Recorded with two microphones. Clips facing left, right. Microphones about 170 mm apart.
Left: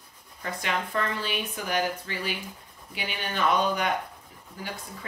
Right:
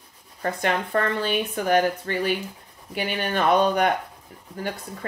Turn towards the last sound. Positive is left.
turn(degrees=-55)  # may be behind; listen again after turning